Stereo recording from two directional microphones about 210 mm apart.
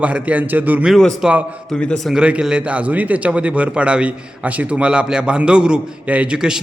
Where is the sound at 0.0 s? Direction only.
5° right (ahead or behind).